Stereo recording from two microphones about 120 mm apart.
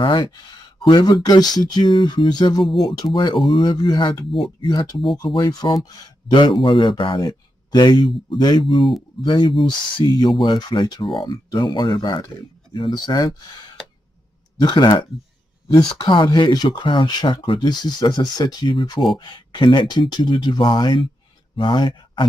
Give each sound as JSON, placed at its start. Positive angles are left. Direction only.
{"t": 0.0, "sound": "speech", "side_deg": 40}